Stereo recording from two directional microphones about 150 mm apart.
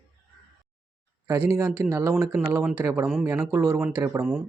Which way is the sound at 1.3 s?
20° right (ahead or behind).